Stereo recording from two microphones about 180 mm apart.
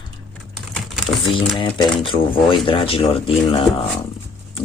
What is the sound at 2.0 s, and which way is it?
Speech, 30° left (ahead or behind).